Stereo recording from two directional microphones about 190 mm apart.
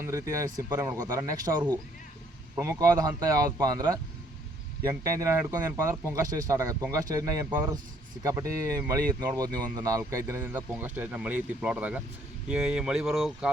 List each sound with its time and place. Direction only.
0.0 s speech: 15° right (ahead or behind); by 13.5 s centre (ahead or behind)